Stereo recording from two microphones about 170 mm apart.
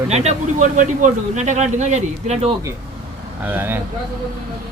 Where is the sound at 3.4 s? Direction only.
10° right (ahead or behind).